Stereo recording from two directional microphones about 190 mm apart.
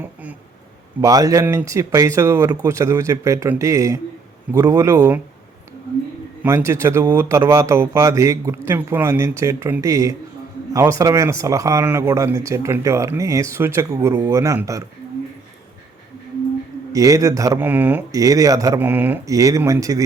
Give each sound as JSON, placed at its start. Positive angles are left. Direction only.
{"t": 0.0, "sound": "a sound", "side_deg": -10}
{"t": 1.0, "sound": "speech", "side_deg": -20}
{"t": 6.4, "sound": "speech", "side_deg": -15}
{"t": 16.9, "sound": "speech", "side_deg": -15}